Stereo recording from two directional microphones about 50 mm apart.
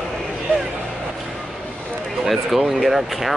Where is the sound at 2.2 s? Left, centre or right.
Centre.